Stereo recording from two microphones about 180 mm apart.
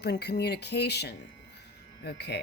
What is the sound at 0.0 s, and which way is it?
Speech, 65° left (ahead or behind).